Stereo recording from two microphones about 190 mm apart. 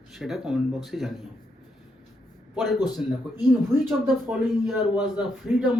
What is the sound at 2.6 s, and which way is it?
Speech, centre (ahead or behind).